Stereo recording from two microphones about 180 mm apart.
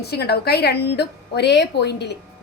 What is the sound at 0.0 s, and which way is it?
A woman's voice, 65° left (ahead or behind).